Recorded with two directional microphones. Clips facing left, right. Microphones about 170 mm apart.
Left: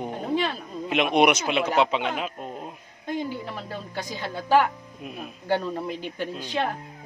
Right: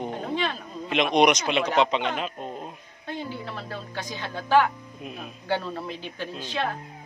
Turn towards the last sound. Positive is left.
turn(degrees=15)  # may be behind; listen again after turning